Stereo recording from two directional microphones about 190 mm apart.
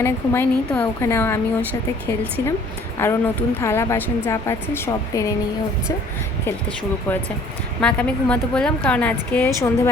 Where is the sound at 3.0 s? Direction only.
15° left (ahead or behind).